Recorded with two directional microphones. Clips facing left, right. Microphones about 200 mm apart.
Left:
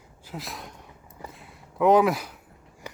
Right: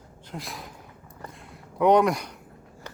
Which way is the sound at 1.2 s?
5° left (ahead or behind).